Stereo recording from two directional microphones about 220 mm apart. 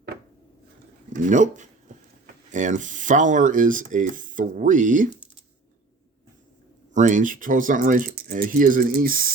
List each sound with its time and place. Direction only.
1.1 s speech: 35° right (ahead or behind)
6.9 s speech: 35° right (ahead or behind)